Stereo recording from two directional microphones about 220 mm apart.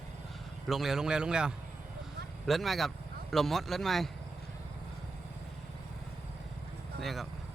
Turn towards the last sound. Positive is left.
turn(degrees=0)  # may be behind; listen again after turning